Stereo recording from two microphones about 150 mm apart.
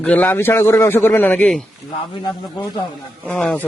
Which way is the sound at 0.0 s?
10° left (ahead or behind).